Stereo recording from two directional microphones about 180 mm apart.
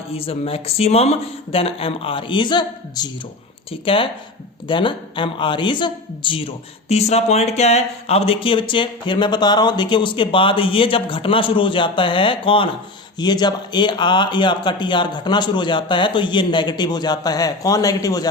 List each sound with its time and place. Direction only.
0.1 s speech: 30° left (ahead or behind)